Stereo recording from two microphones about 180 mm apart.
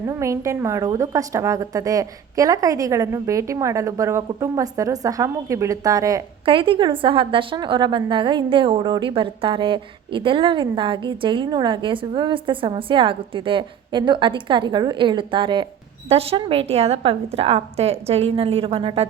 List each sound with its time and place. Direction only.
0.1 s a woman's voice: 15° right (ahead or behind)
6.4 s a woman's voice: 30° right (ahead or behind)